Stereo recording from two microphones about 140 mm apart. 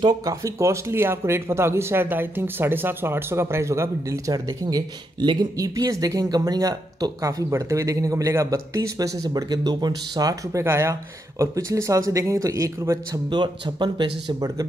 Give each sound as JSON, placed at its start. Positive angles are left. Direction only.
{"t": 0.0, "sound": "speech", "side_deg": -25}